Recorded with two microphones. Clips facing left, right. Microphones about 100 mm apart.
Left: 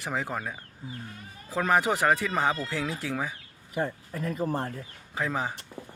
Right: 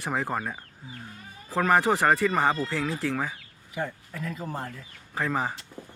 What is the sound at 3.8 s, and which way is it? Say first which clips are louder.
Speech: left 2 dB; 35° left (ahead or behind).